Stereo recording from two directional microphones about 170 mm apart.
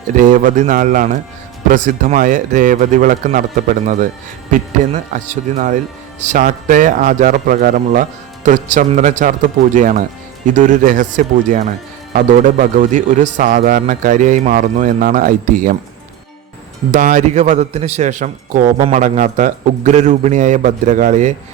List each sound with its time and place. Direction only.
0.2 s a man's voice: 50° right (ahead or behind)
16.9 s a man's voice: 45° right (ahead or behind)